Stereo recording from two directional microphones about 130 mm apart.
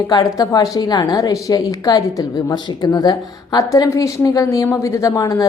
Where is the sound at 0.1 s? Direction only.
30° left (ahead or behind).